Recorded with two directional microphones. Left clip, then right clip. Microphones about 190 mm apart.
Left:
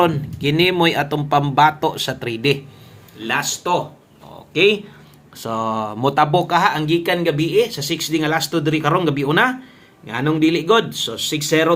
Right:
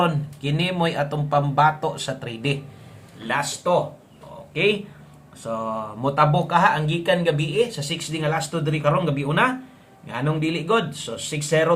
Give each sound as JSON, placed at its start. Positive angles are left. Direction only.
{"t": 0.0, "sound": "speech", "side_deg": 35}
{"t": 4.5, "sound": "speech", "side_deg": 60}